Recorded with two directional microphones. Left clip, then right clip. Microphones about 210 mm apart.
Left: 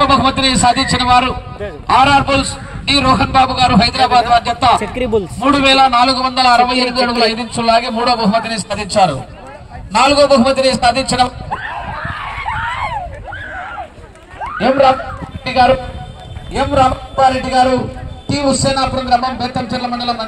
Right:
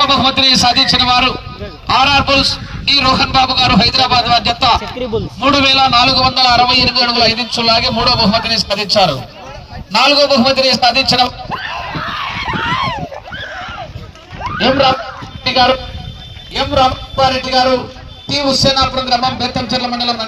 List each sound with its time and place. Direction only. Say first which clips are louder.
0.0 s a man's voice: right 1 dB; 45° right (ahead or behind)
4.9 s speech: left 3 dB; 35° left (ahead or behind)
5.4 s a man's voice: even; 45° right (ahead or behind)
9.9 s a sound: even; 50° right (ahead or behind)
14.6 s a man's voice: left 1 dB; 45° right (ahead or behind)